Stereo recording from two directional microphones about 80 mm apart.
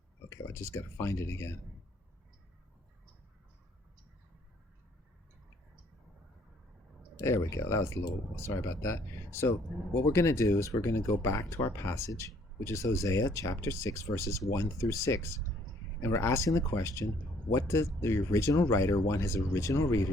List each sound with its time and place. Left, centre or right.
0.3 s speech: left
7.2 s speech: left